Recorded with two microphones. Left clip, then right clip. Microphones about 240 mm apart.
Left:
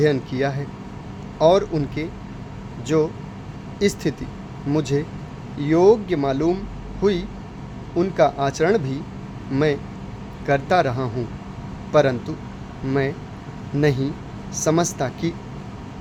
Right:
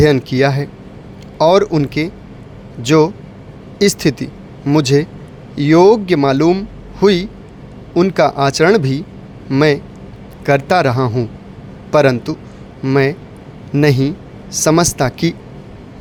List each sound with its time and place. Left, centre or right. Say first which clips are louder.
0.0 s a man's voice: right 8 dB; right